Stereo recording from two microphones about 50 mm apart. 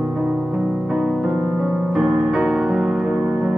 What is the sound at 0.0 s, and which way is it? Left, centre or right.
Music, centre.